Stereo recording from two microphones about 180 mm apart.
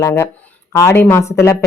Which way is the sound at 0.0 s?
15° left (ahead or behind).